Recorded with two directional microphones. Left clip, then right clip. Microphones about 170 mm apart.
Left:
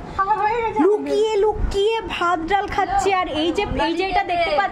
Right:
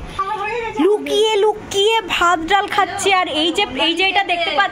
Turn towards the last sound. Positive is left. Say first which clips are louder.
# right 4 dB
turn(degrees=5)  # may be behind; listen again after turning